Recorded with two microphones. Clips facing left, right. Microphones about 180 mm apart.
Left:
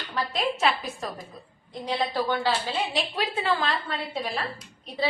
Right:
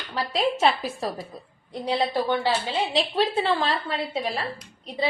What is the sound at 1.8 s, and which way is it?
A woman's voice, 30° right (ahead or behind).